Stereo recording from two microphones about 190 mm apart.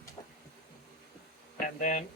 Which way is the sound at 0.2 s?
30° left (ahead or behind).